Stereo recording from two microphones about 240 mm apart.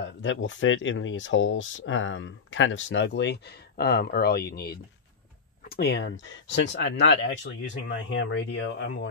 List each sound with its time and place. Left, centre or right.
0.0 s speech: left